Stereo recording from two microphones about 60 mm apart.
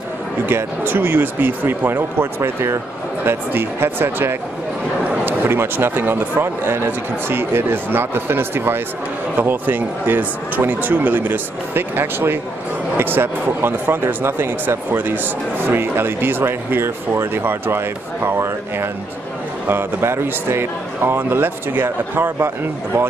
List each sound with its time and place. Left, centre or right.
0.5 s speech: right